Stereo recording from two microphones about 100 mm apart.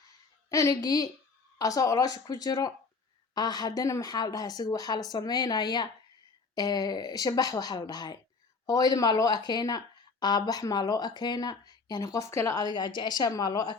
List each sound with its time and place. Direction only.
0.5 s speech: 35° left (ahead or behind)
12.5 s speech: 45° left (ahead or behind)